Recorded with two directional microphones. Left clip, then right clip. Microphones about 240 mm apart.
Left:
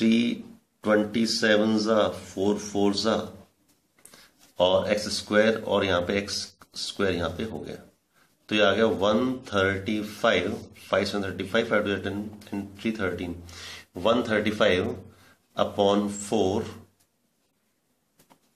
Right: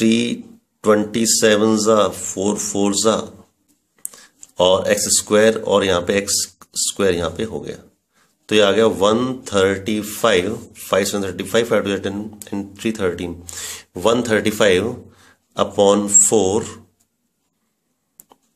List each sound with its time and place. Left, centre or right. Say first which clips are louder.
0.0 s speech: right 7 dB; right
4.6 s speech: right 7 dB; right